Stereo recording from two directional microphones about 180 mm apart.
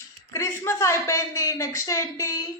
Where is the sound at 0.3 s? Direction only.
15° left (ahead or behind).